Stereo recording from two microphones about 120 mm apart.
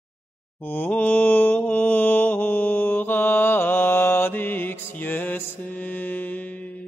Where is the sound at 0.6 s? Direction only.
15° left (ahead or behind).